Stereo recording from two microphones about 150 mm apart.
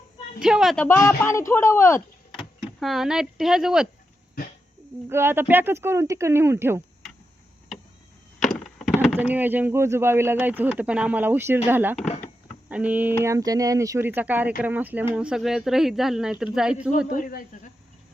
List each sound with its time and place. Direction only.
0.3 s a woman's voice: 5° right (ahead or behind)
0.8 s speech: 15° left (ahead or behind)
2.4 s speech: centre (ahead or behind)
5.0 s speech: 15° right (ahead or behind)
8.4 s wood: centre (ahead or behind)
9.1 s speech: 10° right (ahead or behind)
17.1 s speech: 65° left (ahead or behind)